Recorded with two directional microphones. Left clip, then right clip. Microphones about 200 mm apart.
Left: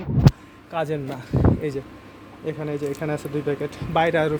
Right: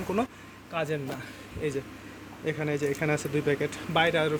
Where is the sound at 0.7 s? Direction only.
20° left (ahead or behind).